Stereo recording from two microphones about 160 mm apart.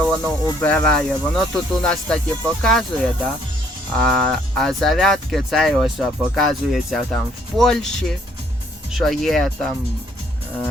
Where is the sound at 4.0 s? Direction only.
5° left (ahead or behind).